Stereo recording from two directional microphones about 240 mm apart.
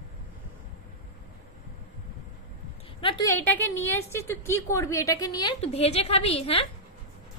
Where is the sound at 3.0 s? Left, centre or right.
Centre.